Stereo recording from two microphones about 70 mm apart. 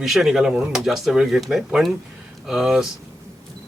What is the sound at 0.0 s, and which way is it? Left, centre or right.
Speech, centre.